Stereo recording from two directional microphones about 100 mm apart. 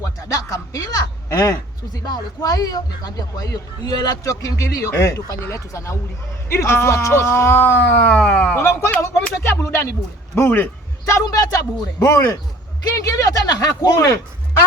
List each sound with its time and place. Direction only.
0.0 s speech: 35° left (ahead or behind); by 8.5 s 10° left (ahead or behind)
8.5 s speech: 25° left (ahead or behind)